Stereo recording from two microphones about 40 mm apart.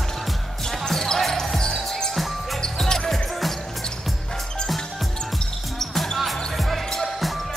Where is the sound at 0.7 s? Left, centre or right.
Centre.